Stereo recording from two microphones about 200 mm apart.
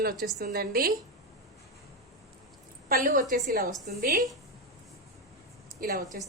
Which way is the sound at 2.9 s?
45° right (ahead or behind).